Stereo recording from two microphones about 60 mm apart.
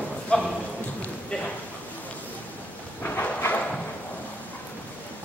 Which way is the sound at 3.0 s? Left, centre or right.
Left.